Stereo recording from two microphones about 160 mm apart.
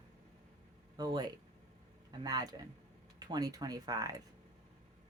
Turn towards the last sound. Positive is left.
turn(degrees=-20)  # may be behind; listen again after turning